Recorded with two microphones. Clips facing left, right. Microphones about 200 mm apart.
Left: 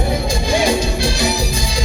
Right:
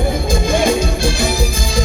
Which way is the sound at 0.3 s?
50° right (ahead or behind).